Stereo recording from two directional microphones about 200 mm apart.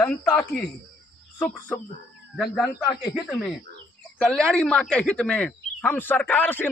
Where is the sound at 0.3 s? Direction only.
5° left (ahead or behind).